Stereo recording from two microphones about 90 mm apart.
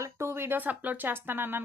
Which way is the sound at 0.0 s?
30° right (ahead or behind).